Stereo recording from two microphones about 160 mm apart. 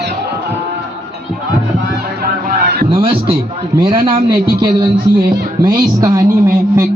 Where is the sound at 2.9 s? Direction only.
35° right (ahead or behind).